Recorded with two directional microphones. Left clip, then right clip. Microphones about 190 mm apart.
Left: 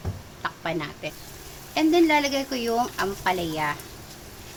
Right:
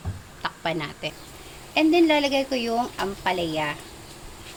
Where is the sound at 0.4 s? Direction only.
25° right (ahead or behind).